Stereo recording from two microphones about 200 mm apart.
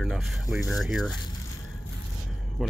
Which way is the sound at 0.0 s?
Centre (ahead or behind).